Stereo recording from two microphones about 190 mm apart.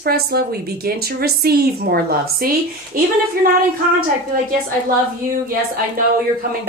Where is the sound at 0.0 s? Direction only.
55° right (ahead or behind).